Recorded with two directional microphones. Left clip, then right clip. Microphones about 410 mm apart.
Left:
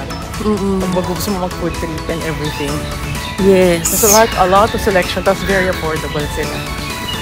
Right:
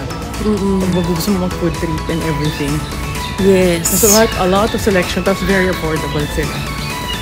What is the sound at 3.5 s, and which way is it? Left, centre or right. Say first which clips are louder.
Speech: left 2 dB; centre.